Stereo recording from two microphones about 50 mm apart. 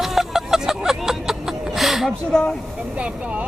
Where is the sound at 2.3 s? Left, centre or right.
Centre.